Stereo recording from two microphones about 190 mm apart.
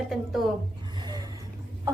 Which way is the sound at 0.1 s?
Centre (ahead or behind).